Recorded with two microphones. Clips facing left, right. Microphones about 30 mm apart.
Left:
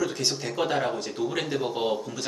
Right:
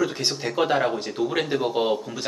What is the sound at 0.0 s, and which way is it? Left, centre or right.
A man's voice, right.